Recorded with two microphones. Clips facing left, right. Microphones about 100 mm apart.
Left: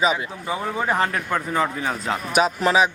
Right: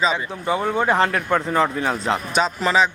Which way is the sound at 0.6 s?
30° right (ahead or behind).